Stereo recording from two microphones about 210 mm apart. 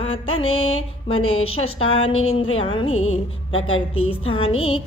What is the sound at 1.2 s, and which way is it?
Speech, 85° left.